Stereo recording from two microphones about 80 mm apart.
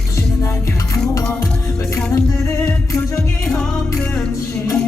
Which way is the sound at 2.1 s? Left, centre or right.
Left.